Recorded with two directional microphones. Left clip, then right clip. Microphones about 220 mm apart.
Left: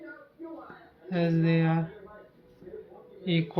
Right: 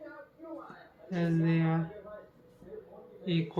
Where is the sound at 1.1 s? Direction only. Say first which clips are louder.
Left 4 dB; 45° left (ahead or behind).